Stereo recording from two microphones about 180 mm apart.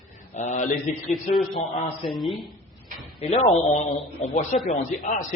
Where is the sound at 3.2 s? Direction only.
35° left (ahead or behind).